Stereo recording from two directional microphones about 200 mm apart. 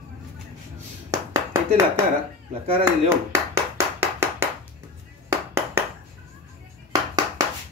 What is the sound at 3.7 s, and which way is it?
Clapping, 10° right (ahead or behind).